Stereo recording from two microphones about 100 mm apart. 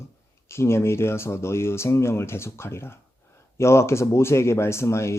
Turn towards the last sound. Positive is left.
turn(degrees=25)  # may be behind; listen again after turning